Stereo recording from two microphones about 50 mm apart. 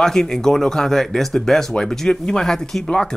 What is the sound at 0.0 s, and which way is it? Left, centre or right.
Speech, centre.